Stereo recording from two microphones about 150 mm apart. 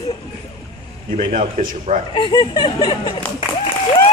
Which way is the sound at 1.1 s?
55° right (ahead or behind).